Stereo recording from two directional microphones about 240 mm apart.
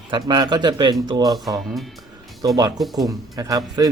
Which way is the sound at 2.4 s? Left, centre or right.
Centre.